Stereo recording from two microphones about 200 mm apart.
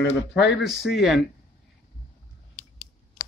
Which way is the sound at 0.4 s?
60° left (ahead or behind).